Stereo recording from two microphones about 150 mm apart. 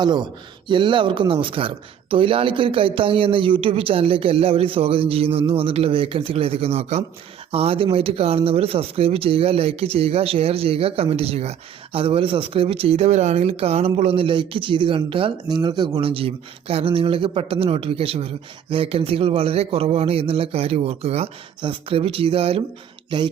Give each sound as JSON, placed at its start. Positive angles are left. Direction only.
{"t": 0.0, "sound": "speech", "side_deg": -30}